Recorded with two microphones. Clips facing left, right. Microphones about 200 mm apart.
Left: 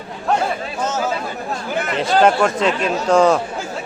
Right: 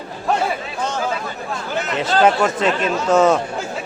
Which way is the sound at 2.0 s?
Centre (ahead or behind).